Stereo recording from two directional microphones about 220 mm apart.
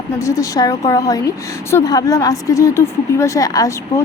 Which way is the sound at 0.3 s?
15° left (ahead or behind).